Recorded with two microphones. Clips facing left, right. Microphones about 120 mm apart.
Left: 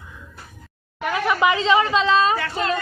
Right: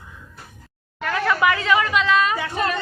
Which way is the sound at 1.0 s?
15° left (ahead or behind).